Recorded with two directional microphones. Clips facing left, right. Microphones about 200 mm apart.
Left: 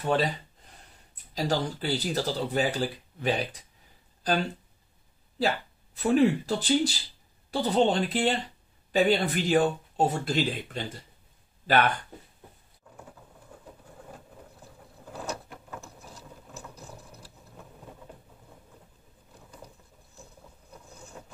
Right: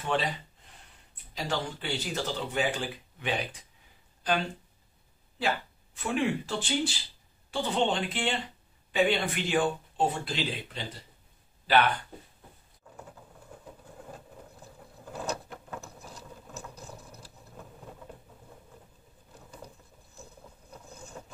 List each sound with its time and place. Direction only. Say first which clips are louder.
0.0 s speech: left 4 dB; 40° left (ahead or behind)
1.3 s speech: left 5 dB; 35° left (ahead or behind)
5.9 s speech: left 7 dB; 40° left (ahead or behind)